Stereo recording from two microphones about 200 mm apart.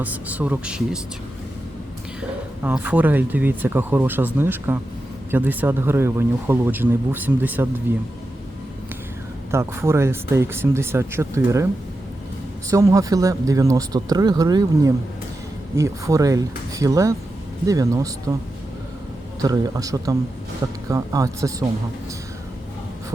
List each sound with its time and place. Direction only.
0.0 s speech: 10° right (ahead or behind)
2.6 s speech: 10° right (ahead or behind)
9.5 s speech: 15° right (ahead or behind)
12.9 s speech: 15° right (ahead or behind)
19.4 s speech: 20° right (ahead or behind)